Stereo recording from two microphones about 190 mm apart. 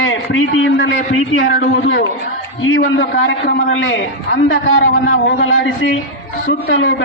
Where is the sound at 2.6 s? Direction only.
90° left.